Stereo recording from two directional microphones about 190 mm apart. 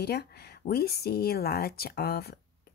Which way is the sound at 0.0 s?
60° left (ahead or behind).